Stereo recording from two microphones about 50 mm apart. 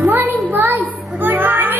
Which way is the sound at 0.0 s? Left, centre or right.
Right.